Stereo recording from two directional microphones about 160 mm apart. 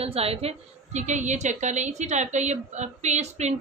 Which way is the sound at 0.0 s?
40° right (ahead or behind).